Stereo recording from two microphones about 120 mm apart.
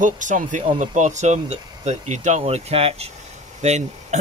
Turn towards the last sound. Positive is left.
turn(degrees=-70)  # may be behind; listen again after turning